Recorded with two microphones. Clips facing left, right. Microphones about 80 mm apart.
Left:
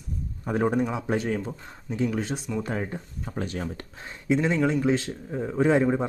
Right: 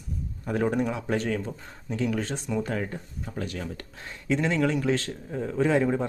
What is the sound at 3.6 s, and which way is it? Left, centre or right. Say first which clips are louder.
Speech: left 2 dB; centre.